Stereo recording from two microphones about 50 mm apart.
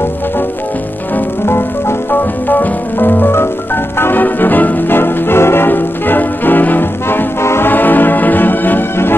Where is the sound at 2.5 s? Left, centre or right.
Left.